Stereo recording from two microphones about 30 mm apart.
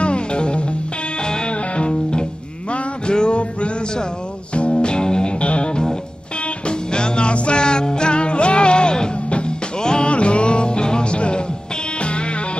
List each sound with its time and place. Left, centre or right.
0.0 s music: left
1.8 s music: left
4.6 s music: left
5.4 s music: left
6.9 s music: left
10.1 s music: left